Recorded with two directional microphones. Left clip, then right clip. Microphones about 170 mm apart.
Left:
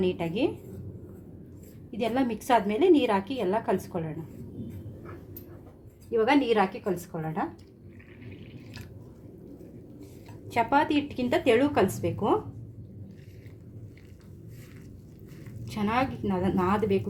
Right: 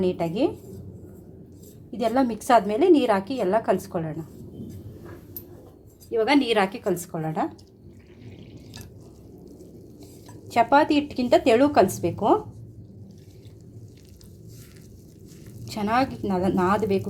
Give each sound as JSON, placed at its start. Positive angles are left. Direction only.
{"t": 0.0, "sound": "a woman's voice", "side_deg": -25}
{"t": 2.0, "sound": "a woman's voice", "side_deg": -25}
{"t": 6.1, "sound": "speech", "side_deg": -40}
{"t": 10.5, "sound": "speech", "side_deg": -30}
{"t": 15.6, "sound": "speech", "side_deg": -35}